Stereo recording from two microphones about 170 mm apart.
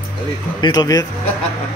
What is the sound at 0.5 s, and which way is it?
Speech, 25° left (ahead or behind).